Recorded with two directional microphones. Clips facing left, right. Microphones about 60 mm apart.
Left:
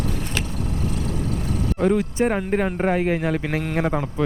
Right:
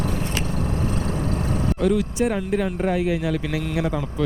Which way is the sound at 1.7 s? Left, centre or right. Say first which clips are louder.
Left 2 dB; left.